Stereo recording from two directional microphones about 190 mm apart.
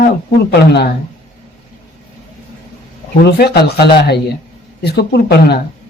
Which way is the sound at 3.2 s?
60° left (ahead or behind).